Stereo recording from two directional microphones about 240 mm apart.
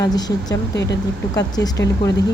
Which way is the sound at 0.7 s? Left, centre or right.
Left.